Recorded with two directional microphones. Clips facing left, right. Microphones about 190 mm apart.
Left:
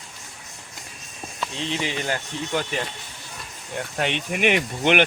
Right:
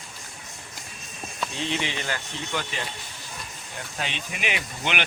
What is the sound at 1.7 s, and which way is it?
Speech, 40° left (ahead or behind).